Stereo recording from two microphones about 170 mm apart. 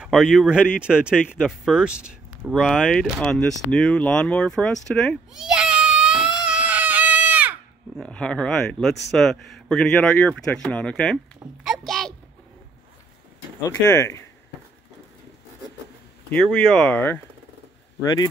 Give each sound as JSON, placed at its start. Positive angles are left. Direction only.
{"t": 0.0, "sound": "speech", "side_deg": -5}
{"t": 4.8, "sound": "baby cry", "side_deg": 5}
{"t": 8.0, "sound": "speech", "side_deg": 5}
{"t": 11.6, "sound": "a sound", "side_deg": 0}
{"t": 13.6, "sound": "speech", "side_deg": 15}
{"t": 16.5, "sound": "speech", "side_deg": 5}